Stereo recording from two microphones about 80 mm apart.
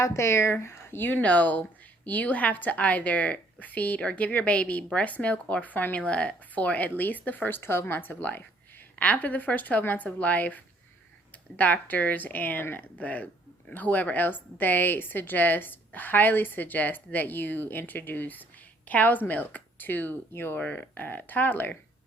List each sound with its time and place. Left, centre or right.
0.0 s speech: left